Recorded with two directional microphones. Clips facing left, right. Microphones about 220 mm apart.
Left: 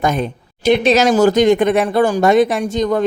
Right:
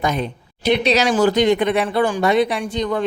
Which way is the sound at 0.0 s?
50° left (ahead or behind).